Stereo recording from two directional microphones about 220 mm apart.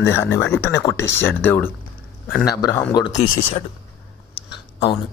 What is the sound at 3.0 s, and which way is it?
Speech, 30° left (ahead or behind).